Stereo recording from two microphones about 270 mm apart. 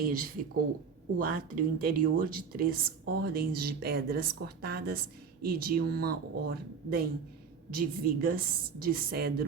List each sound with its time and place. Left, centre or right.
0.0 s speech: right